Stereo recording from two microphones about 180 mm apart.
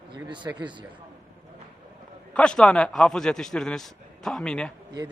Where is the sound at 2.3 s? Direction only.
5° left (ahead or behind).